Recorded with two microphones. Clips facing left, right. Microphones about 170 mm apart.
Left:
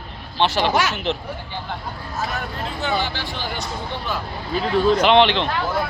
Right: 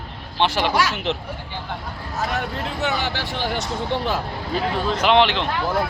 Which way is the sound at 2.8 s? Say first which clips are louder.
Left 1 dB; 70° right (ahead or behind).